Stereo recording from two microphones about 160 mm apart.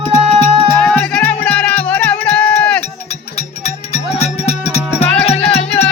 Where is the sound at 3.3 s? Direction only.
45° left (ahead or behind).